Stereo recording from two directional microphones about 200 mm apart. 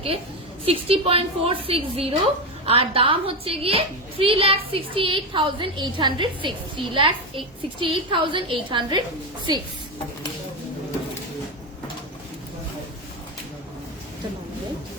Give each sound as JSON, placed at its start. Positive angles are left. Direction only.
{"t": 0.6, "sound": "a woman's voice", "side_deg": -30}